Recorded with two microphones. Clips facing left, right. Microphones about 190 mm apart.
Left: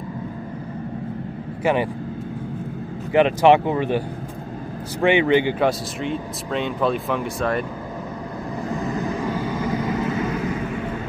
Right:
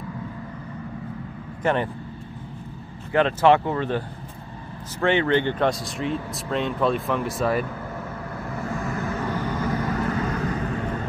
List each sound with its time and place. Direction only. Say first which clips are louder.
1.6 s speech: left 3 dB; 10° left (ahead or behind)
3.1 s speech: left 3 dB; 15° left (ahead or behind)
5.0 s speech: left 3 dB; 15° left (ahead or behind); by 7.6 s centre (ahead or behind)
8.6 s vehicle: left 4 dB; 20° left (ahead or behind)